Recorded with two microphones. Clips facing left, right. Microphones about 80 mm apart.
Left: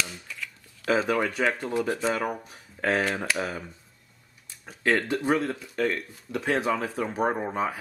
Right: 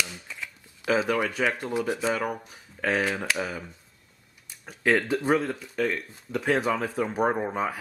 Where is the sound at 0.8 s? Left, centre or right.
Centre.